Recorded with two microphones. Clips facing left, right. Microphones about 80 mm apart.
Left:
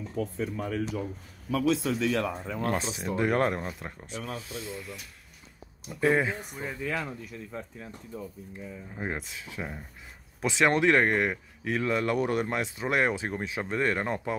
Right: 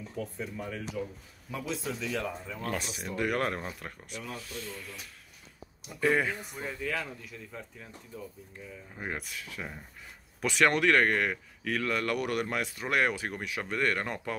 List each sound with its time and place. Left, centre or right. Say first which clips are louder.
0.2 s speech: left 6 dB; left
1.5 s speech: left 9 dB; left
2.4 s speech: left 6 dB; left
2.7 s speech: left 3 dB; left
3.5 s speech: left 3 dB; centre
5.9 s speech: left 2 dB; centre; by 7.9 s left
8.5 s speech: left 5 dB; centre